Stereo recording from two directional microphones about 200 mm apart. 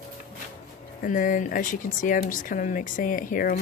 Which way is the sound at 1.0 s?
40° left (ahead or behind).